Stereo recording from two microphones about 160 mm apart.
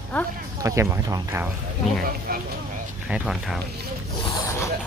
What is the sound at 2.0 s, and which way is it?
Speech, 65° right (ahead or behind).